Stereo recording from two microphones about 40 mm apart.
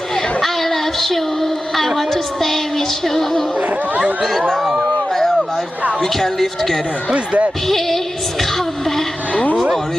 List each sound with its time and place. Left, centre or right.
0.4 s child singing: centre
2.0 s music: centre
4.2 s speech: centre
5.1 s a sound: centre
6.0 s music: centre
7.1 s speech: right
7.7 s speech: centre
8.4 s a sound: centre